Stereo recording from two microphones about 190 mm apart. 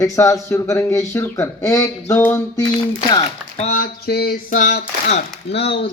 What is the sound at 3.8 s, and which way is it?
Speech, 55° left (ahead or behind).